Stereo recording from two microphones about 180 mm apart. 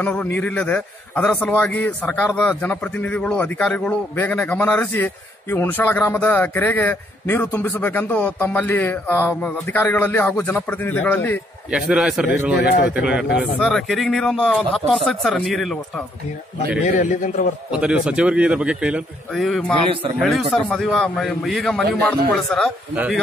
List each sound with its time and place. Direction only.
0.4 s a man's voice: 5° left (ahead or behind)
11.7 s a man's voice: 5° right (ahead or behind)
16.8 s a man's voice: 45° left (ahead or behind)
17.7 s a man's voice: 5° right (ahead or behind)